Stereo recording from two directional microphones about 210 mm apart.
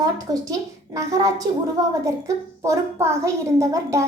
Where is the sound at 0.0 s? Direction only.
15° right (ahead or behind).